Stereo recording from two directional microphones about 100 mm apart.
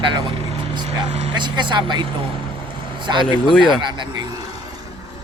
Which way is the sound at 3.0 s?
50° right (ahead or behind).